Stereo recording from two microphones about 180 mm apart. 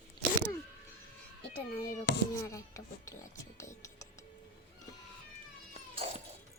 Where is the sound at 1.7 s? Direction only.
50° left (ahead or behind).